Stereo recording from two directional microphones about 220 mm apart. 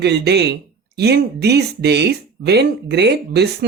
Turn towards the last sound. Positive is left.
turn(degrees=-50)  # may be behind; listen again after turning